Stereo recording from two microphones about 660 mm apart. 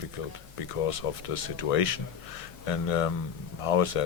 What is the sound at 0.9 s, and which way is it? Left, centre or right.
Speech, left.